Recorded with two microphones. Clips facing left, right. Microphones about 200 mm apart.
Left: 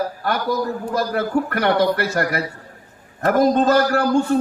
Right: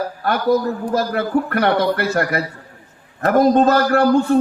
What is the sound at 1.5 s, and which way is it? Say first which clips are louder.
A man's voice: even; 55° right (ahead or behind).